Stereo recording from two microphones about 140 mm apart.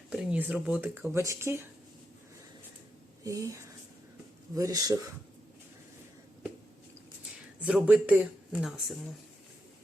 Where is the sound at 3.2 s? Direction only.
25° right (ahead or behind).